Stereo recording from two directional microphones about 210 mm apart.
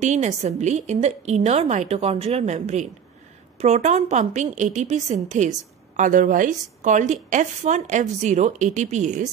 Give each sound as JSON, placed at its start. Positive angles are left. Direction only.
{"t": 0.0, "sound": "a woman's voice", "side_deg": -35}